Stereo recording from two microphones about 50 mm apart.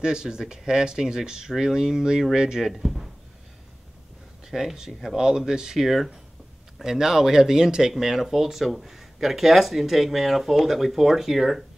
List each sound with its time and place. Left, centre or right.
0.0 s speech: centre
2.7 s speech: centre
4.5 s speech: centre